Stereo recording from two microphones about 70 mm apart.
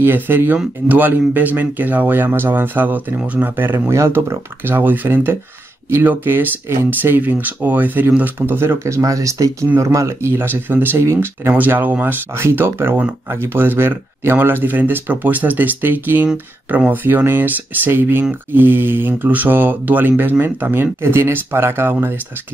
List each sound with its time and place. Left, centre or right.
0.0 s speech: right
3.9 s speech: right
11.5 s speech: right